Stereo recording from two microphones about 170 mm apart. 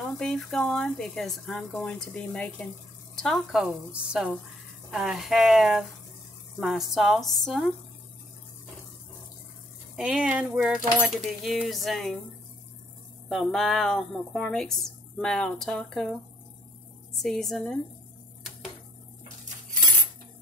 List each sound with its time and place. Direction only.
0.2 s speech: centre (ahead or behind)
9.9 s speech: 5° right (ahead or behind)
13.3 s speech: centre (ahead or behind)
17.2 s speech: centre (ahead or behind)